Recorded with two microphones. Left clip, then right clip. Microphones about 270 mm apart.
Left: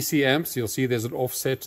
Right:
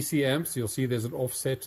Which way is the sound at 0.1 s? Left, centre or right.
Centre.